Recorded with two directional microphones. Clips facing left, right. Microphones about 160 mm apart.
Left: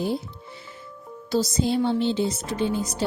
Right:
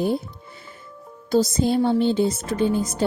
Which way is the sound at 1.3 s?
50° right (ahead or behind).